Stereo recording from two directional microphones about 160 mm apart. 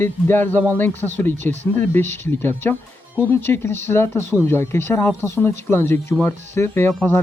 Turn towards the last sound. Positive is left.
turn(degrees=10)  # may be behind; listen again after turning